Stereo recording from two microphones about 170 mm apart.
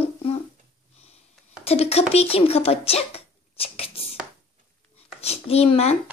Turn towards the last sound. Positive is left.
turn(degrees=35)  # may be behind; listen again after turning